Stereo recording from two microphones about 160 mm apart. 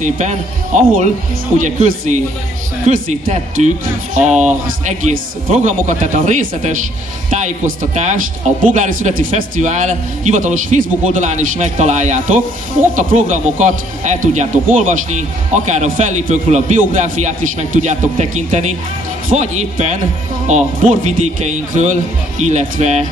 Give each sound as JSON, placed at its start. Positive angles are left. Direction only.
{"t": 0.0, "sound": "speech", "side_deg": -50}